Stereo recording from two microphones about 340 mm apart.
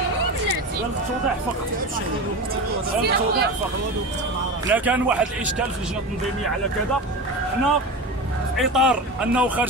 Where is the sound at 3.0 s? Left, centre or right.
Right.